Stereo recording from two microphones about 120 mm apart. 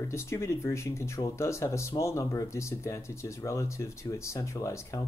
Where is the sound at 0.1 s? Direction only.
25° left (ahead or behind).